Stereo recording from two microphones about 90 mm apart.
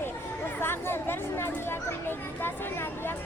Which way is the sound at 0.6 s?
25° left (ahead or behind).